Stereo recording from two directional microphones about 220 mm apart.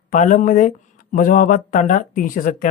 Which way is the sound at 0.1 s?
35° left (ahead or behind).